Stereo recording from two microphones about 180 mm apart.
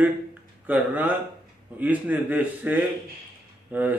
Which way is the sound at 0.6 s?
10° right (ahead or behind).